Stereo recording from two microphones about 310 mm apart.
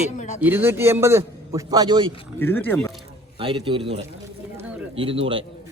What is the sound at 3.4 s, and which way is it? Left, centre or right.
A man's voice, centre.